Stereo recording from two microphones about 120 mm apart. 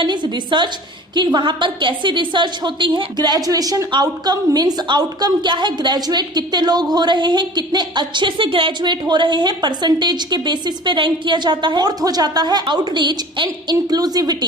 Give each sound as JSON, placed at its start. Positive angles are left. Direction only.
{"t": 0.0, "sound": "a woman's voice", "side_deg": -40}